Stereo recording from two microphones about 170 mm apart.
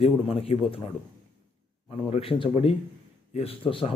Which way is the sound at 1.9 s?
35° left (ahead or behind).